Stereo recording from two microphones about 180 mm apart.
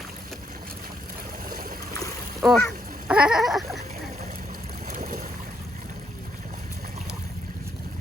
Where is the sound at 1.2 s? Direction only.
50° right (ahead or behind).